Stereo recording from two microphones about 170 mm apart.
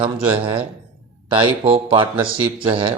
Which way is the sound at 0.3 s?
30° right (ahead or behind).